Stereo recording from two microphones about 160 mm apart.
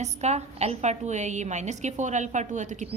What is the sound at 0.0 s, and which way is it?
A woman's voice, 45° right (ahead or behind).